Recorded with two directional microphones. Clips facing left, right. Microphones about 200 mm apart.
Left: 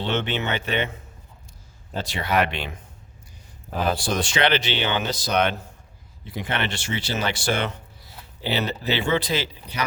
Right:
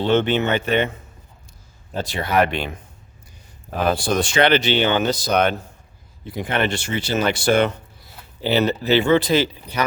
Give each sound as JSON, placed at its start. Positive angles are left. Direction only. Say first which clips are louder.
{"t": 0.1, "sound": "speech", "louder": "right 8 dB", "side_deg": -45}
{"t": 2.0, "sound": "speech", "louder": "right 4 dB", "side_deg": -50}
{"t": 3.8, "sound": "speech", "louder": "right 5 dB", "side_deg": -50}